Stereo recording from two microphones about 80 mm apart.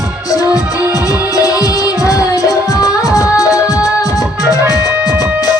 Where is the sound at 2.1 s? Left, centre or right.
Left.